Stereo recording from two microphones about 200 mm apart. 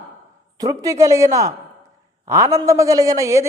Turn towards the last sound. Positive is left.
turn(degrees=-15)  # may be behind; listen again after turning